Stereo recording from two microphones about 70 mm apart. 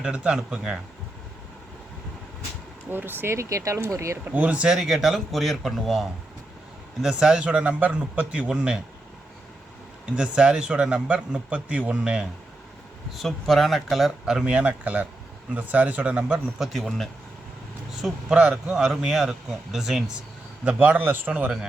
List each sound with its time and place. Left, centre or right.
0.0 s speech: centre
2.9 s speech: right
4.3 s speech: right
10.2 s speech: centre
13.1 s speech: centre
16.6 s speech: centre
18.3 s speech: centre
20.7 s speech: right